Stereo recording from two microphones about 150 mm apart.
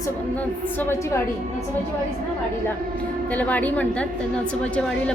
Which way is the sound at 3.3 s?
10° left (ahead or behind).